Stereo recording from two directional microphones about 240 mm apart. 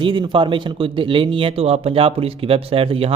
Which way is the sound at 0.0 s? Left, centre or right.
Right.